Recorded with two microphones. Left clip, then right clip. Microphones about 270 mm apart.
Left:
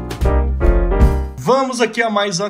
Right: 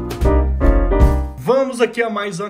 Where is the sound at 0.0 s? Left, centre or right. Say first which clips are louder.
Right 2 dB; centre.